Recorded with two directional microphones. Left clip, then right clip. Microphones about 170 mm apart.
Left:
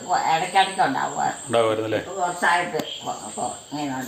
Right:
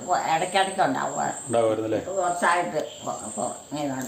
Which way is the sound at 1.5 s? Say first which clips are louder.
Left 1 dB; 15° left (ahead or behind).